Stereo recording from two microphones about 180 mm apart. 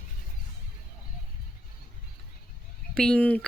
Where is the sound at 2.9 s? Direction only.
5° left (ahead or behind).